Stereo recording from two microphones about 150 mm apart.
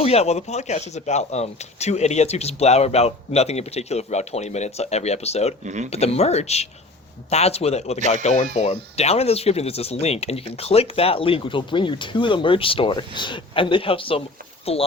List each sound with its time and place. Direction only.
0.0 s speech: 45° left (ahead or behind)
5.6 s speech: 55° right (ahead or behind)
5.9 s speech: 45° left (ahead or behind)